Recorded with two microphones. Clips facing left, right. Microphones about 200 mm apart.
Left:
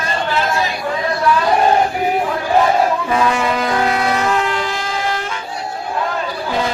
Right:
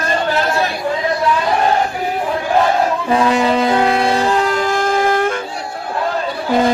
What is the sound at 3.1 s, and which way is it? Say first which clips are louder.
Wind instrument: right 7 dB; 30° right (ahead or behind).